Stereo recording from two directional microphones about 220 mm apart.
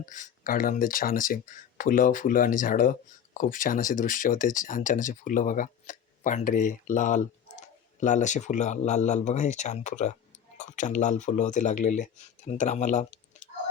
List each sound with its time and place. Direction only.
0.0 s speech: 35° left (ahead or behind)